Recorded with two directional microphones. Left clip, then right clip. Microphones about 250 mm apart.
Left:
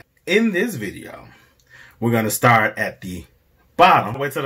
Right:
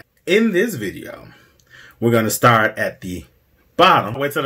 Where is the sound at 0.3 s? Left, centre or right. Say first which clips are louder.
Right 2 dB; left.